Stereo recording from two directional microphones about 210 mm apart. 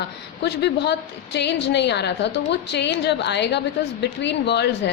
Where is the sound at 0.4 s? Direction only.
55° left (ahead or behind).